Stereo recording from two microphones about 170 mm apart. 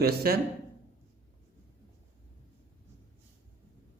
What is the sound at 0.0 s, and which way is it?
Speech, 65° right (ahead or behind).